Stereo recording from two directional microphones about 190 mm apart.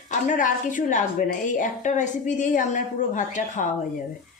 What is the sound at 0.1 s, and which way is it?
A woman's voice, 45° left (ahead or behind).